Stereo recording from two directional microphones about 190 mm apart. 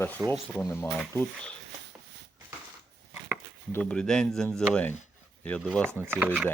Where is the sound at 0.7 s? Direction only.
15° left (ahead or behind).